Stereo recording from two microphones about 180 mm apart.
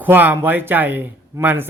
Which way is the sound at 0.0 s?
10° right (ahead or behind).